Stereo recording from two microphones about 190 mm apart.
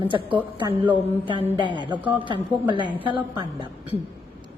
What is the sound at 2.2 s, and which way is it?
Speech, 25° right (ahead or behind).